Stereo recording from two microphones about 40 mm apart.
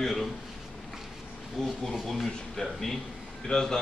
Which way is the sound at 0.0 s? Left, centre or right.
Centre.